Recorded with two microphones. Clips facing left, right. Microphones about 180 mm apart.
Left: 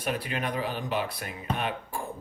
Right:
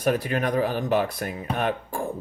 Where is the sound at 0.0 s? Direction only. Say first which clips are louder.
Right 7 dB; 45° right (ahead or behind).